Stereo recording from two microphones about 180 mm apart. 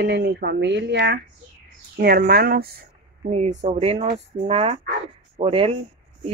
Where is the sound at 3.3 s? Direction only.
40° right (ahead or behind).